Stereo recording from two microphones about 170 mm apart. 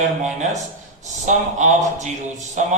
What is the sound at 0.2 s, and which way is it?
A man's voice, 45° right (ahead or behind).